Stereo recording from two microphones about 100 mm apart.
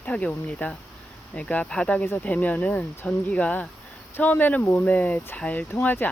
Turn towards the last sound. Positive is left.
turn(degrees=20)  # may be behind; listen again after turning